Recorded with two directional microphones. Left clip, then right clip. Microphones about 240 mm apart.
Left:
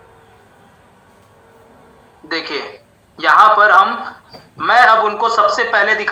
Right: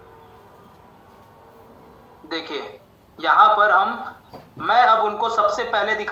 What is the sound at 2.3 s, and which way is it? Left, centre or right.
A man's voice, centre.